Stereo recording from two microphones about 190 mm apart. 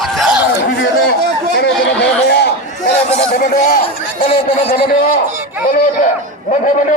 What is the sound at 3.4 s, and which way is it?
Speech, 45° left (ahead or behind).